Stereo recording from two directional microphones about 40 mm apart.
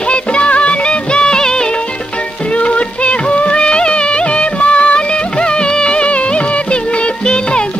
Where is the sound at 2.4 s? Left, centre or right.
Left.